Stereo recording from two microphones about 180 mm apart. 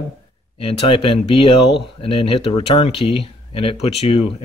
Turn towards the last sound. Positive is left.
turn(degrees=30)  # may be behind; listen again after turning